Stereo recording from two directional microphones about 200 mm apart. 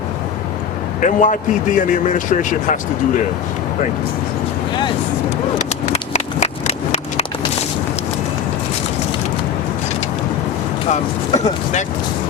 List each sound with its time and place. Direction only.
1.0 s a man's voice: 40° left (ahead or behind)
5.5 s a sound: 35° left (ahead or behind)
10.8 s a man's voice: 35° left (ahead or behind)